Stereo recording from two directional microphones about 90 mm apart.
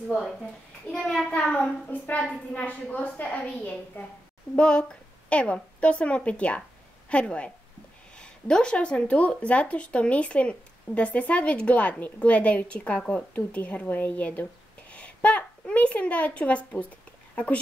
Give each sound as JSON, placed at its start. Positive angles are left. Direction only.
{"t": 0.9, "sound": "speech", "side_deg": 10}